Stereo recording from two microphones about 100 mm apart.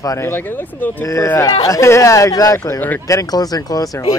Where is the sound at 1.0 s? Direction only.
30° left (ahead or behind).